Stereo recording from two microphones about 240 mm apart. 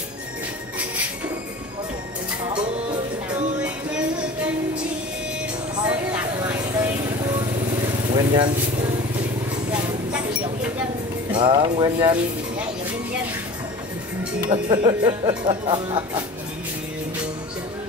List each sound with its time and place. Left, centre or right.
5.9 s vehicle: centre
8.1 s speech: centre
9.7 s a sound: centre
11.3 s speech: right
14.5 s speech: centre